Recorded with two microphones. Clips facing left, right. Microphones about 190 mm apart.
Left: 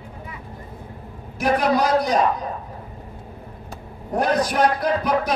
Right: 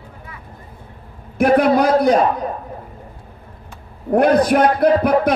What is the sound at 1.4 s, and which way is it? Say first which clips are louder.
Speech: right 6 dB; 55° right (ahead or behind).